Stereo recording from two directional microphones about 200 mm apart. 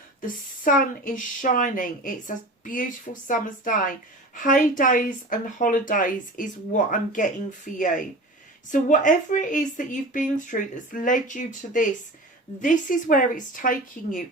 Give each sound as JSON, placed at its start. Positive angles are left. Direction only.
{"t": 0.2, "sound": "speech", "side_deg": 40}